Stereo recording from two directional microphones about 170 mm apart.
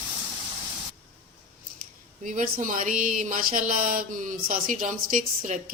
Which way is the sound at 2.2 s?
50° right (ahead or behind).